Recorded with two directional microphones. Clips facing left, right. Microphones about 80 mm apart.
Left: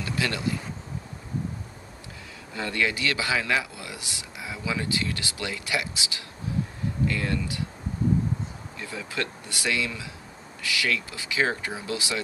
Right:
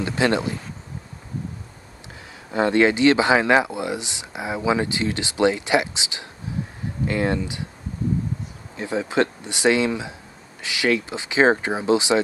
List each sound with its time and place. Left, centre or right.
0.0 s speech: right
2.5 s speech: right
8.7 s speech: right